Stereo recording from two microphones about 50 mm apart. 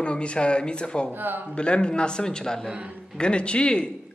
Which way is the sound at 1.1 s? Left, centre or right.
Right.